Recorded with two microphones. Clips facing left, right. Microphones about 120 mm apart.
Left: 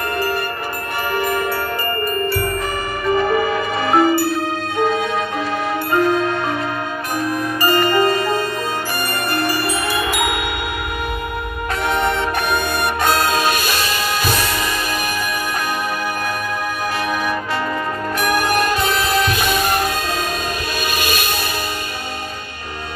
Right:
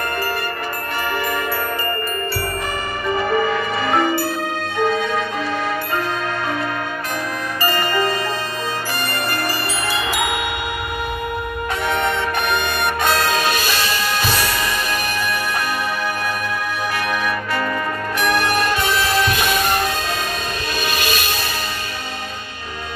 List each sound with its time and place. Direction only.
3.3 s music: 10° left (ahead or behind)
7.7 s music: 20° left (ahead or behind)
9.3 s music: 20° left (ahead or behind)
11.8 s music: 10° left (ahead or behind)
18.2 s music: 5° left (ahead or behind)